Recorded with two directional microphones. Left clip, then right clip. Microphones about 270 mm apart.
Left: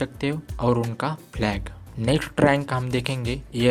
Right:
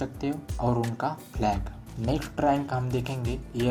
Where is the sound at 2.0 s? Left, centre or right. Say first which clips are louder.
Left 5 dB; left.